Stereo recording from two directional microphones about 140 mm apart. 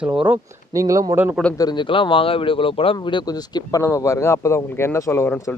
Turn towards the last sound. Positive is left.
turn(degrees=15)  # may be behind; listen again after turning